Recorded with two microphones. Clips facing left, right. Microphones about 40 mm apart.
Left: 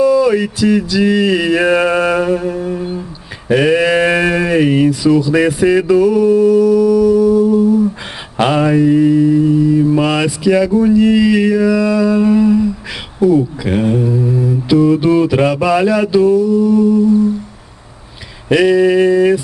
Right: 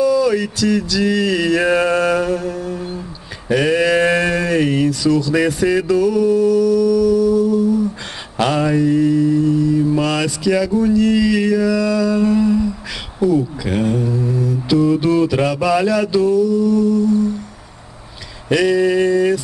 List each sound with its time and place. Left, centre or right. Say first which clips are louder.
0.0 s mantra: left 4 dB; centre
18.5 s mantra: left 4 dB; centre